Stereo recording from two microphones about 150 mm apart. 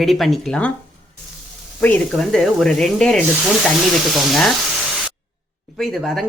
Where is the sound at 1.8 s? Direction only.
5° left (ahead or behind).